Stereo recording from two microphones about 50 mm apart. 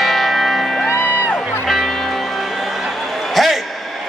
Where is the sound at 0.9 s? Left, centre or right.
Left.